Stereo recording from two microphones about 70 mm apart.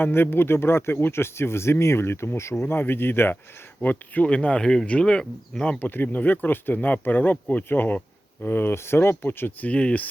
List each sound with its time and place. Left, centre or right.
0.0 s speech: left
3.8 s speech: left
5.8 s speech: left